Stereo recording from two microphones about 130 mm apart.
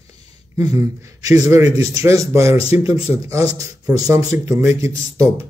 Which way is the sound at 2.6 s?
50° left (ahead or behind).